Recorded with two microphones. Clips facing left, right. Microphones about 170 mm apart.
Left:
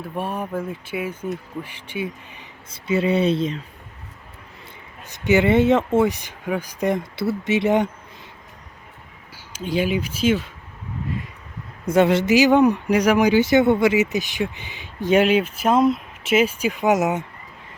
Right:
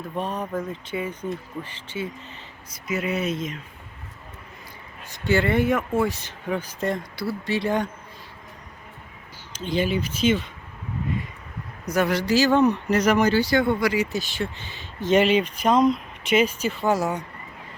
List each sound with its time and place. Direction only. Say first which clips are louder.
0.0 s speech: left 1 dB; 10° left (ahead or behind)
2.6 s speech: left 7 dB; 30° left (ahead or behind)
5.0 s speech: left 5 dB; 20° left (ahead or behind)
9.5 s speech: left 2 dB; 10° left (ahead or behind)
11.9 s speech: left 6 dB; 25° left (ahead or behind)